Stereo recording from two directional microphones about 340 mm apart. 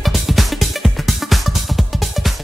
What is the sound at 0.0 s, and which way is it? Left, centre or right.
Music, centre.